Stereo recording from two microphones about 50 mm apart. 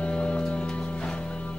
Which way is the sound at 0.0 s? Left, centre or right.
Left.